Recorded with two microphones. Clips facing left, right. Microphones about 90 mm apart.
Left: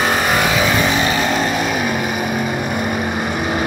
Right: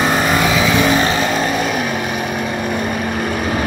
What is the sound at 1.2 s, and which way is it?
Vehicle, 10° right (ahead or behind).